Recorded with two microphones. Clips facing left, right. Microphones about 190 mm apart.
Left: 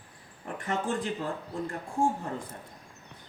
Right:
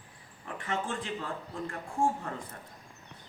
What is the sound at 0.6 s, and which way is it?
Speech, 40° left (ahead or behind).